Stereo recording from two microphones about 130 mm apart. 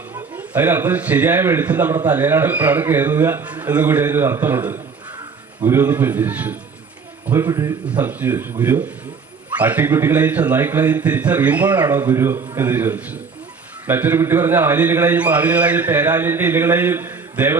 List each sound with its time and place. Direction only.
0.3 s a man's voice: 10° right (ahead or behind)